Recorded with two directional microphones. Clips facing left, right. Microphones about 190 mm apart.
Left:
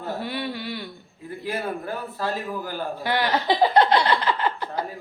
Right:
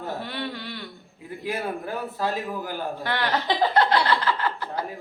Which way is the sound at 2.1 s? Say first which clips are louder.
Even; 15° right (ahead or behind).